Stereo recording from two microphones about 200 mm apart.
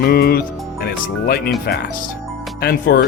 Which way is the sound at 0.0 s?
50° left (ahead or behind).